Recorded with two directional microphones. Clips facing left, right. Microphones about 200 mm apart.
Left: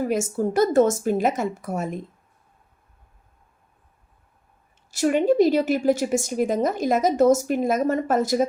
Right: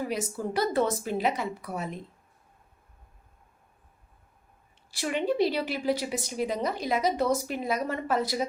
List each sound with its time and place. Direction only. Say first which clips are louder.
0.0 s a woman's voice: left 8 dB; 45° left (ahead or behind)
4.9 s a woman's voice: left 9 dB; 45° left (ahead or behind)